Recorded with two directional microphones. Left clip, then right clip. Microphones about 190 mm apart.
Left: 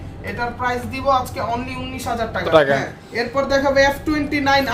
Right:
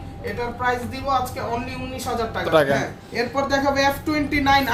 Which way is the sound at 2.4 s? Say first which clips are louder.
Left 4 dB; 15° left (ahead or behind).